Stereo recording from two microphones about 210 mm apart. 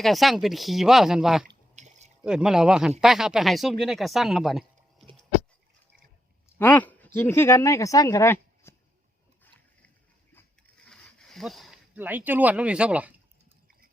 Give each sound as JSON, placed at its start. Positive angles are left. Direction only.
{"t": 0.0, "sound": "speech", "side_deg": 0}
{"t": 1.7, "sound": "a sound", "side_deg": -35}
{"t": 2.2, "sound": "speech", "side_deg": -5}
{"t": 6.6, "sound": "speech", "side_deg": 10}
{"t": 10.8, "sound": "speech", "side_deg": 5}